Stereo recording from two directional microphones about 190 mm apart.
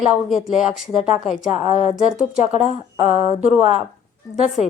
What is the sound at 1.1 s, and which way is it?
Speech, 40° left (ahead or behind).